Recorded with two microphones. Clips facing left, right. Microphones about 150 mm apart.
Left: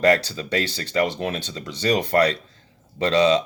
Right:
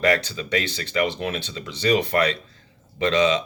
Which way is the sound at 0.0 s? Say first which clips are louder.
Left 3 dB; 40° left (ahead or behind).